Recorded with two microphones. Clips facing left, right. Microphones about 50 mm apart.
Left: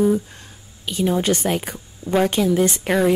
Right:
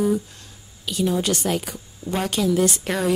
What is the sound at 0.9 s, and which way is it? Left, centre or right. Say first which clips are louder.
A woman's voice: left 3 dB; left.